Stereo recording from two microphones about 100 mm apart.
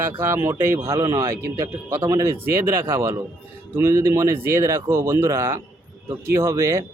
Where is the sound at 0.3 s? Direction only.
25° right (ahead or behind).